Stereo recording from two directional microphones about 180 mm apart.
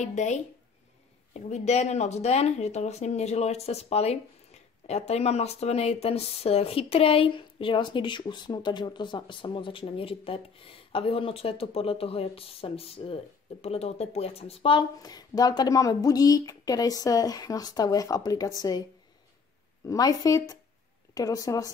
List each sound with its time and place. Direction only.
0.0 s speech: 40° left (ahead or behind)
1.5 s speech: 40° left (ahead or behind); by 18.9 s 20° left (ahead or behind)
19.9 s a woman's voice: 20° left (ahead or behind)